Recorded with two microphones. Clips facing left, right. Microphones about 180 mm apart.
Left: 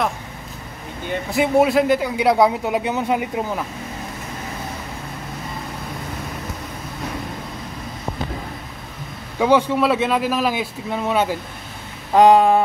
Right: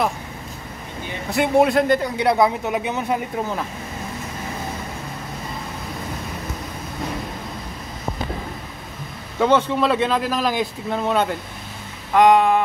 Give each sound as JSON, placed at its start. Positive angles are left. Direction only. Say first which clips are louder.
{"t": 1.3, "sound": "speech", "louder": "even", "side_deg": 0}
{"t": 9.4, "sound": "speech", "louder": "left 1 dB", "side_deg": 10}
{"t": 12.1, "sound": "a sound", "louder": "left 2 dB", "side_deg": 30}